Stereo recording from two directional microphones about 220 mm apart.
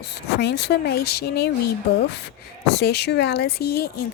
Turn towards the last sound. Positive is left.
turn(degrees=45)  # may be behind; listen again after turning